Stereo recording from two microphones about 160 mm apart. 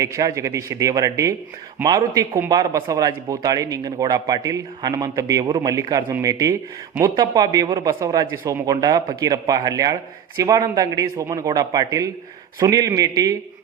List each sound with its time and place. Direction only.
0.0 s speech: 20° right (ahead or behind)